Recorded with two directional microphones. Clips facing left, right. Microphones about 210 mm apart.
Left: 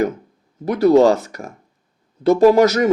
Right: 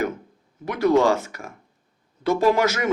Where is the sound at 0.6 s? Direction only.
35° left (ahead or behind).